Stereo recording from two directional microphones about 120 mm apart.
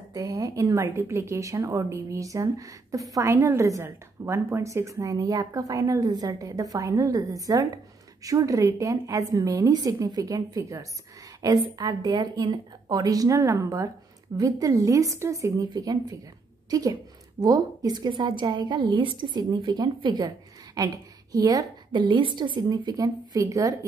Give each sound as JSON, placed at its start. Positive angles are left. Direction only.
{"t": 0.1, "sound": "a woman's voice", "side_deg": -30}
{"t": 17.4, "sound": "a woman's voice", "side_deg": -30}